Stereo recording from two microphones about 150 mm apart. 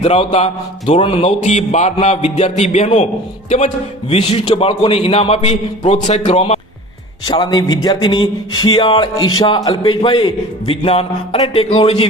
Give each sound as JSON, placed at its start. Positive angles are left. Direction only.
{"t": 0.0, "sound": "speech", "side_deg": 40}
{"t": 4.1, "sound": "a man's voice", "side_deg": 40}
{"t": 7.3, "sound": "a sound", "side_deg": 25}
{"t": 9.6, "sound": "a man's voice", "side_deg": 30}